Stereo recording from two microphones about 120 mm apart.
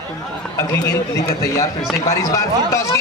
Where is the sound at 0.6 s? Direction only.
25° left (ahead or behind).